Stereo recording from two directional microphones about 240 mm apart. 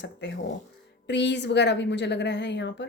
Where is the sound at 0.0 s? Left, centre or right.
Left.